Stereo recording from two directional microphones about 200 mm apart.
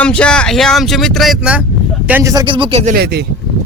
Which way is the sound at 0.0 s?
5° left (ahead or behind).